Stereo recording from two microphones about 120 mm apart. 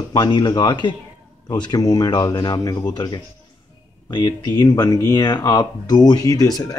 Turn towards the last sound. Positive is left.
turn(degrees=30)  # may be behind; listen again after turning